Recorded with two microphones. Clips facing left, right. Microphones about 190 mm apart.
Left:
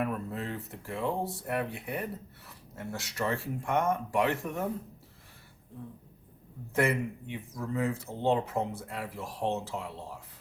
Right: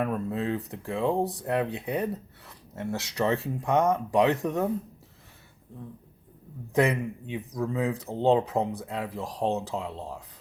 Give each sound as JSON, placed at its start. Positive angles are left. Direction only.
{"t": 0.3, "sound": "a sound", "side_deg": -15}
{"t": 1.0, "sound": "speech", "side_deg": -15}
{"t": 6.7, "sound": "speech", "side_deg": -15}